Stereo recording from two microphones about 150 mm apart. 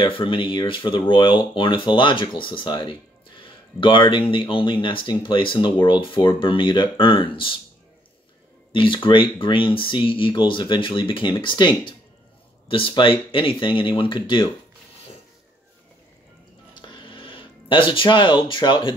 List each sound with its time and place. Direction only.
0.0 s speech: 35° left (ahead or behind)
8.7 s speech: 35° left (ahead or behind)
16.8 s a sound: 35° left (ahead or behind)